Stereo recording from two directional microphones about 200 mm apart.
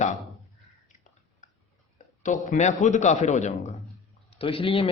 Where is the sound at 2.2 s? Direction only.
40° left (ahead or behind).